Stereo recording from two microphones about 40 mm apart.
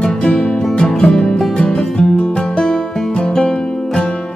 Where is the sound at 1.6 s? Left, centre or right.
Centre.